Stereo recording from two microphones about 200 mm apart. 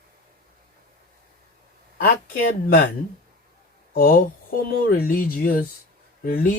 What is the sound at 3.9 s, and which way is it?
Speech, 45° left (ahead or behind).